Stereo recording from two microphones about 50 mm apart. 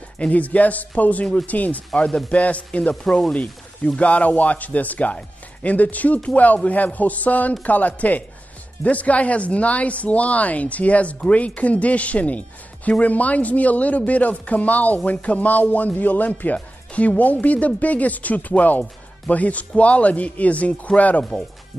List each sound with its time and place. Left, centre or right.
0.2 s speech: left
2.0 s speech: centre
2.9 s speech: centre
3.3 s speech: left